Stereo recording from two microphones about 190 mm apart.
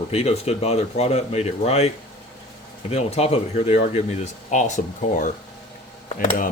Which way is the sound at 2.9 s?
35° left (ahead or behind).